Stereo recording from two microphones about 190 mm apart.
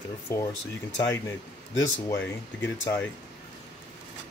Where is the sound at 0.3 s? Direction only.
15° left (ahead or behind).